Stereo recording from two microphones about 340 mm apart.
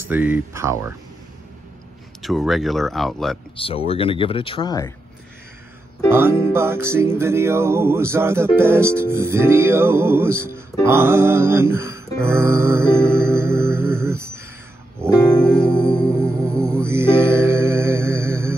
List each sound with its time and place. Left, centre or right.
0.1 s music: centre
2.2 s speech: centre
3.5 s speech: centre
6.1 s music: centre
15.3 s speech: centre
16.8 s music: centre